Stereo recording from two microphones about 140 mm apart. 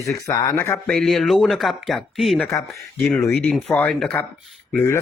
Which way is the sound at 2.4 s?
20° left (ahead or behind).